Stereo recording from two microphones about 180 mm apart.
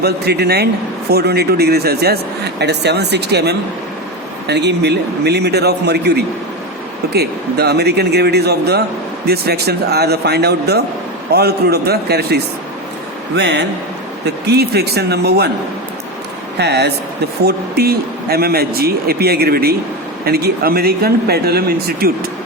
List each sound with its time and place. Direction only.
0.0 s speech: 65° right (ahead or behind)
16.6 s speech: 65° right (ahead or behind)